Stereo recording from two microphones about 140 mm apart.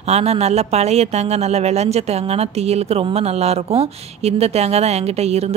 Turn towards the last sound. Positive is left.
turn(degrees=-50)  # may be behind; listen again after turning